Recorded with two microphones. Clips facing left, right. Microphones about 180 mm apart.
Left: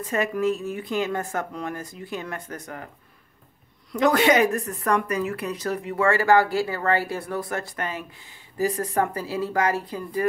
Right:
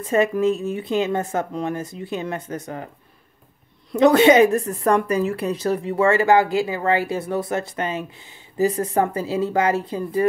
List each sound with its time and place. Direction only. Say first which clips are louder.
0.0 s a woman's voice: right 5 dB; 25° right (ahead or behind)
3.9 s a woman's voice: right 6 dB; 25° right (ahead or behind)